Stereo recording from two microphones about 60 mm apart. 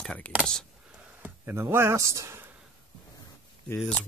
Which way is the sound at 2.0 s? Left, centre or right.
Right.